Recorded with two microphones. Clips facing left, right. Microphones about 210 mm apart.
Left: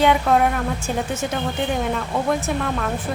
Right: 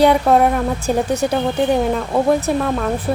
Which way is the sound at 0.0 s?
35° right (ahead or behind).